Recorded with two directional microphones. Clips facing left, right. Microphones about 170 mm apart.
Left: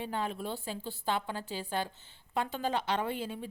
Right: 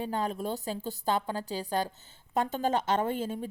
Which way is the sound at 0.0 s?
40° right (ahead or behind).